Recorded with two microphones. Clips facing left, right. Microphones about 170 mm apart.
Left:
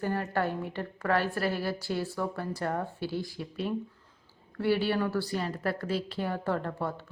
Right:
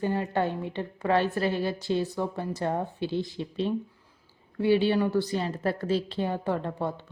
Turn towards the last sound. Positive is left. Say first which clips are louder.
# right 2 dB
turn(degrees=-20)  # may be behind; listen again after turning